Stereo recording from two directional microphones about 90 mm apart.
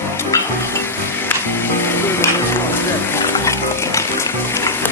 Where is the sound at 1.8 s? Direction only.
25° left (ahead or behind).